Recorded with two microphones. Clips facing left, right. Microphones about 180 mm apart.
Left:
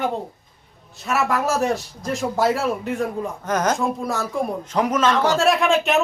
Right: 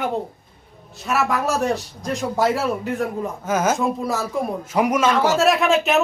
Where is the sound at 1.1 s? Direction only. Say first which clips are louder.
Even; centre (ahead or behind).